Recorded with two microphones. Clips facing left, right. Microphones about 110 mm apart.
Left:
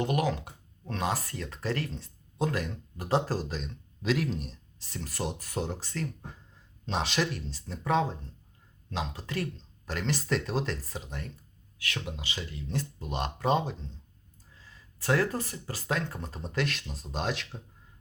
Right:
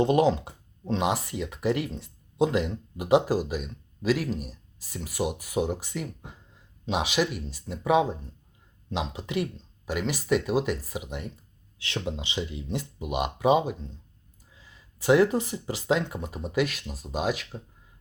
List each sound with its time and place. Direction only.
0.0 s speech: 25° right (ahead or behind)
11.8 s speech: 25° right (ahead or behind); by 17.6 s 5° right (ahead or behind)